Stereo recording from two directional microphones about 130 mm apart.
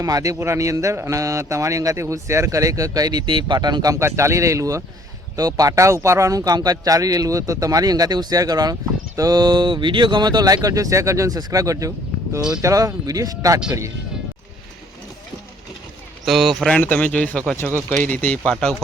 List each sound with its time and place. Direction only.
0.0 s speech: 25° right (ahead or behind)
16.2 s speech: centre (ahead or behind)